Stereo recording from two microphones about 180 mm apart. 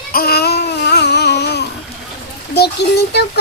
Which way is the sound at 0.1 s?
60° left (ahead or behind).